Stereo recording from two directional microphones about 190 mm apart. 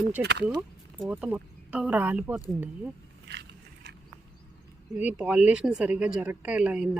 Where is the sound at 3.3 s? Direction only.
65° right (ahead or behind).